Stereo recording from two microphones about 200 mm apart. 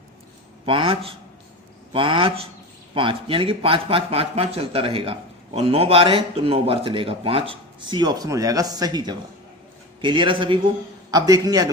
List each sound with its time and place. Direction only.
0.6 s a man's voice: 25° right (ahead or behind)